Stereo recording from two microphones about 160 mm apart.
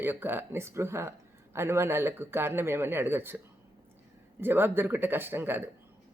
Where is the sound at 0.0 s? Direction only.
15° right (ahead or behind).